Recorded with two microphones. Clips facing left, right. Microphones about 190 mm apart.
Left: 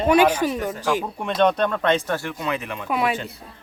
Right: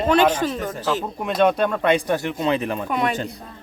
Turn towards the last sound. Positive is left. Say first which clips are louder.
# even
turn(degrees=5)  # may be behind; listen again after turning